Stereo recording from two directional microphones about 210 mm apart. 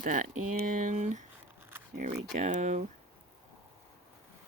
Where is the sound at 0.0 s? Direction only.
40° right (ahead or behind).